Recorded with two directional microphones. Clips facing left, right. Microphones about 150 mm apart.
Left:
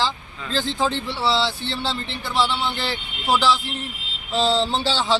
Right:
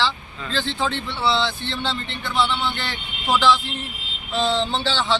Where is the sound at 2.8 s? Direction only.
10° left (ahead or behind).